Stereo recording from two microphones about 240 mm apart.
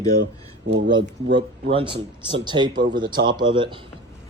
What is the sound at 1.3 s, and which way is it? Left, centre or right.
Speech, right.